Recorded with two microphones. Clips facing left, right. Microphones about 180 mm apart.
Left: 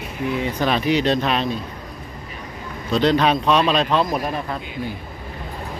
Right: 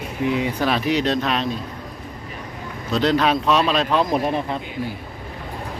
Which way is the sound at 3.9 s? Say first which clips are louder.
Right 1 dB; 20° right (ahead or behind).